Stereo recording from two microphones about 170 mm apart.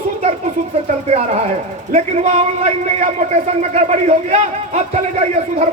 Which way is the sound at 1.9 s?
45° right (ahead or behind).